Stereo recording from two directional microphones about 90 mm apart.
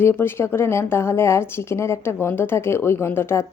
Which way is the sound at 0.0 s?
25° left (ahead or behind).